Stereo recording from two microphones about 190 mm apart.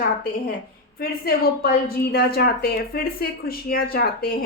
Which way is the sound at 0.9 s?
55° left (ahead or behind).